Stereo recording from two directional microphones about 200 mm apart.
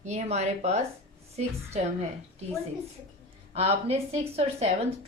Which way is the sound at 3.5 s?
30° right (ahead or behind).